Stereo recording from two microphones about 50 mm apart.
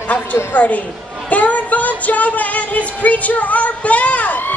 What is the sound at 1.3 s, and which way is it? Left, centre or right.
Music, left.